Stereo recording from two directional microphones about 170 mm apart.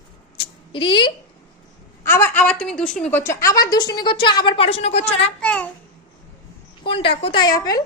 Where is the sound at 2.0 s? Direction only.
15° left (ahead or behind); by 5.3 s 40° left (ahead or behind).